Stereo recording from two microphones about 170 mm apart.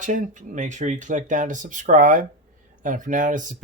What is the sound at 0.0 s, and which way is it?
Speech, 50° right (ahead or behind).